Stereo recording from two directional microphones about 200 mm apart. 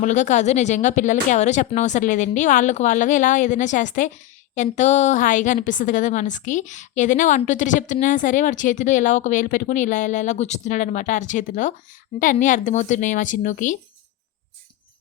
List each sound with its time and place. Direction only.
0.0 s a woman's voice: 35° left (ahead or behind)